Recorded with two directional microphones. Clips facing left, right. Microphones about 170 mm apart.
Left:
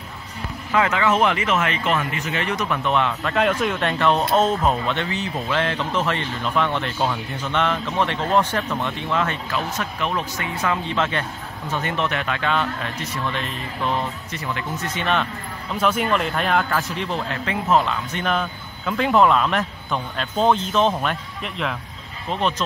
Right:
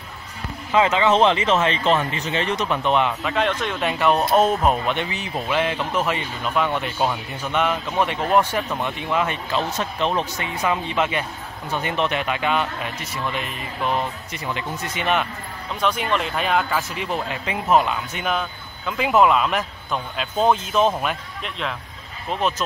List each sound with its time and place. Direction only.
0.7 s speech: 20° right (ahead or behind)
3.3 s speech: 5° left (ahead or behind)
3.8 s speech: 10° right (ahead or behind)
9.5 s speech: 30° right (ahead or behind)
10.6 s speech: 15° right (ahead or behind)
15.7 s speech: 5° left (ahead or behind)